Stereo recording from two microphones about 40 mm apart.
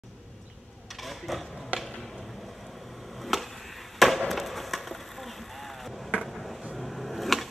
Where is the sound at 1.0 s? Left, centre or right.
Centre.